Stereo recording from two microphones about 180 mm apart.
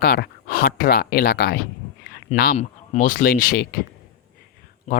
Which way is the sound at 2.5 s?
45° left (ahead or behind).